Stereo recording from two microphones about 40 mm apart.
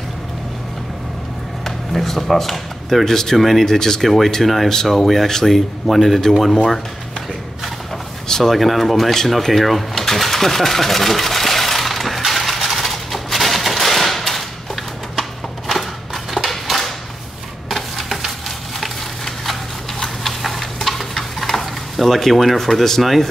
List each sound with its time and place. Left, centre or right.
1.6 s speech: centre
8.3 s speech: centre
8.5 s speech: centre
12.3 s a sound: centre